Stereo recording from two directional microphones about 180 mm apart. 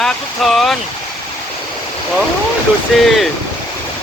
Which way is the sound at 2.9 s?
Centre (ahead or behind).